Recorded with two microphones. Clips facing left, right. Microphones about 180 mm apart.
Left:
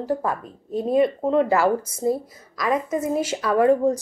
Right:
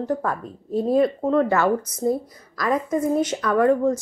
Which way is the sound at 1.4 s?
30° left (ahead or behind).